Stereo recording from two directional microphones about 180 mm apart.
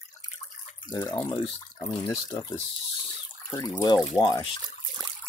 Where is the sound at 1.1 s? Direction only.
25° left (ahead or behind).